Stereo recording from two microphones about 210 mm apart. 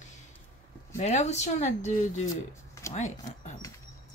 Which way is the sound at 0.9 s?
30° left (ahead or behind).